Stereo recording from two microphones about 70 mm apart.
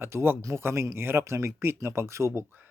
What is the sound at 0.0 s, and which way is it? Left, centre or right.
Speech, right.